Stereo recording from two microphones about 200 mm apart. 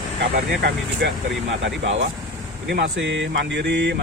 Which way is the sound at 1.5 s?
65° right (ahead or behind).